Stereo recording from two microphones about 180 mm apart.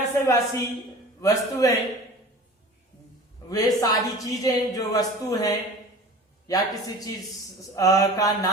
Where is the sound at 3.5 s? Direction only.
20° left (ahead or behind).